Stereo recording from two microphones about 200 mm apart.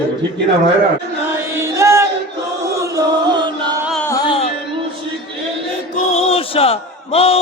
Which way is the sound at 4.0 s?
15° left (ahead or behind).